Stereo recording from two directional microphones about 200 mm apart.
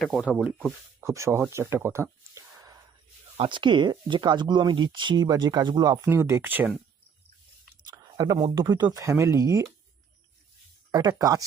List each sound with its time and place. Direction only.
0.0 s speech: centre (ahead or behind)
8.1 s speech: 20° right (ahead or behind)
10.9 s speech: 20° right (ahead or behind)